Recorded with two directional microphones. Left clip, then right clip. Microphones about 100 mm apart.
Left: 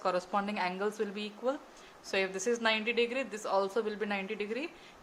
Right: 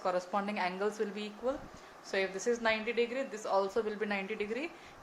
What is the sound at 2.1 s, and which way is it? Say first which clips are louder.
A woman's voice: left 1 dB; 65° left (ahead or behind).